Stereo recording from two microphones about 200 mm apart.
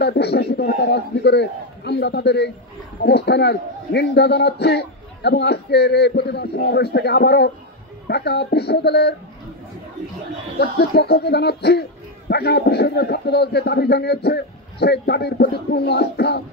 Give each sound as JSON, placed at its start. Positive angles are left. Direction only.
{"t": 0.0, "sound": "a man's voice", "side_deg": 55}
{"t": 10.6, "sound": "a man's voice", "side_deg": 55}